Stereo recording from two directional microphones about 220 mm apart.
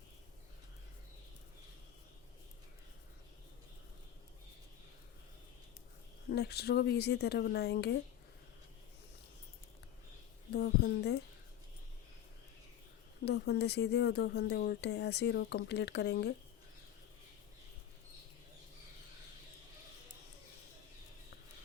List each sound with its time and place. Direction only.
6.3 s speech: 45° left (ahead or behind)
10.5 s speech: 50° left (ahead or behind)
13.2 s speech: 50° left (ahead or behind)